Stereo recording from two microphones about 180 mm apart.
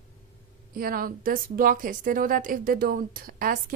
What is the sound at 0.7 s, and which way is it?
Speech, 55° right (ahead or behind).